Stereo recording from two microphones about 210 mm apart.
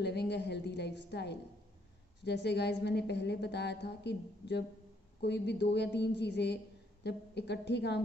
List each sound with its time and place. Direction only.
0.0 s a woman's voice: 55° left (ahead or behind)